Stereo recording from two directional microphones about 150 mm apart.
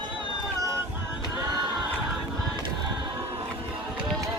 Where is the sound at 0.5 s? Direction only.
20° right (ahead or behind).